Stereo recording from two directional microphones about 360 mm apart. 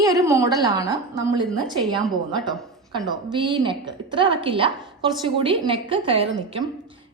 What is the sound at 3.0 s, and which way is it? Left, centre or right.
A woman's voice, centre.